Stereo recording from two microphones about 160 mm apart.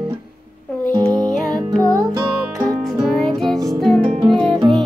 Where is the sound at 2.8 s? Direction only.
Centre (ahead or behind).